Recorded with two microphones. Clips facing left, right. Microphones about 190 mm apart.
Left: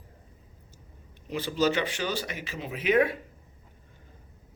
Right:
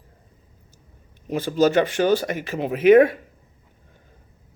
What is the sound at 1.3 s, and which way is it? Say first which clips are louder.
Speech: right 7 dB; 45° right (ahead or behind).